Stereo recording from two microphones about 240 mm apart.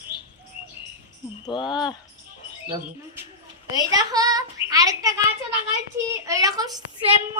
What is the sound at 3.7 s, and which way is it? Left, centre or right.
A woman's voice, centre.